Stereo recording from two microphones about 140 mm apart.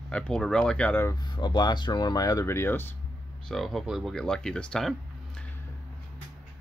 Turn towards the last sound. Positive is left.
turn(degrees=5)  # may be behind; listen again after turning